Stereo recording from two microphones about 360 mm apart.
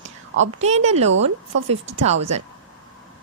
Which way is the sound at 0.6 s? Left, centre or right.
Centre.